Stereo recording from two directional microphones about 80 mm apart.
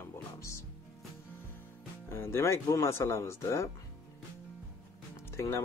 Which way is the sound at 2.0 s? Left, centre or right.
Left.